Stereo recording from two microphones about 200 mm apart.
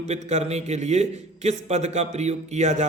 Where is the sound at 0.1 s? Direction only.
35° right (ahead or behind).